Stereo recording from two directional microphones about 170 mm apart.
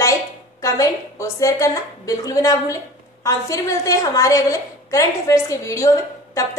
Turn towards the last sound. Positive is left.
turn(degrees=20)  # may be behind; listen again after turning